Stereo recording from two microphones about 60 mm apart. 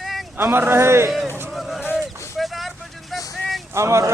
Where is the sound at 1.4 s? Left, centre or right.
Centre.